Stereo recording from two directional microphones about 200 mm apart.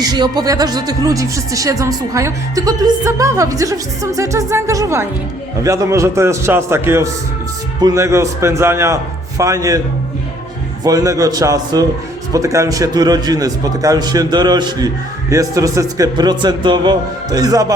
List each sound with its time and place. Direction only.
0.0 s speech: 20° right (ahead or behind)
10.8 s a man's voice: 15° right (ahead or behind)